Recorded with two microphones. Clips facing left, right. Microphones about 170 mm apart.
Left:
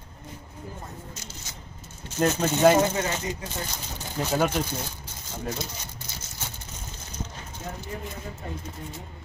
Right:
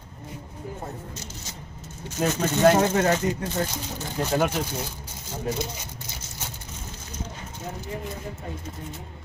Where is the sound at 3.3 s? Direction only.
55° right (ahead or behind).